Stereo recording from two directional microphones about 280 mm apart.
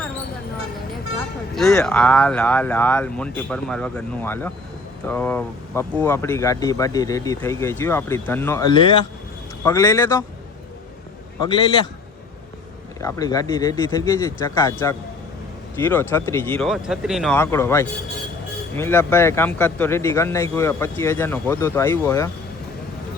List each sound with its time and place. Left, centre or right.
1.5 s speech: centre
11.3 s speech: centre
13.0 s speech: centre